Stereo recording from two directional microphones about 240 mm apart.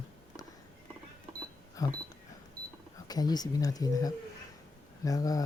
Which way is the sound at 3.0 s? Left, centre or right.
Centre.